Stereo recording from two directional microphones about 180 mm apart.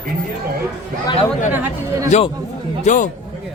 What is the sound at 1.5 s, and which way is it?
Speech, 10° right (ahead or behind).